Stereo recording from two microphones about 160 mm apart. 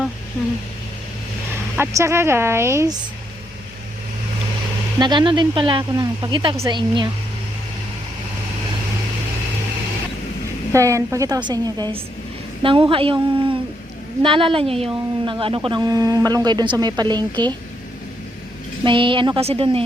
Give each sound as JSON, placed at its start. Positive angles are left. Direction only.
{"t": 1.8, "sound": "a woman's voice", "side_deg": -20}
{"t": 4.9, "sound": "a woman's voice", "side_deg": -30}
{"t": 10.7, "sound": "a woman's voice", "side_deg": -20}
{"t": 18.9, "sound": "a woman's voice", "side_deg": -30}